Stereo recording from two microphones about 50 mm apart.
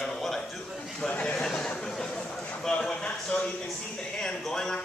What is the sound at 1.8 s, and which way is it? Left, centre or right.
Chatter, centre.